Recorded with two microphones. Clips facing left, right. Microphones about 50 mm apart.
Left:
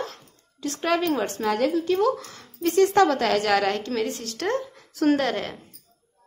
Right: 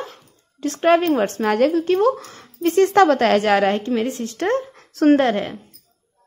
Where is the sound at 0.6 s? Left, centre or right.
Right.